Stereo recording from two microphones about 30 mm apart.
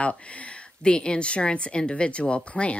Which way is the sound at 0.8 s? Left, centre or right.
Left.